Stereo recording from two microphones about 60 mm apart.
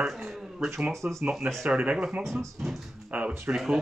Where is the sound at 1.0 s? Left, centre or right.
Right.